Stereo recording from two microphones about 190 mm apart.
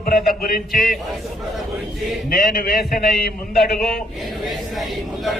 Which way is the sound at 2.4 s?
50° left (ahead or behind).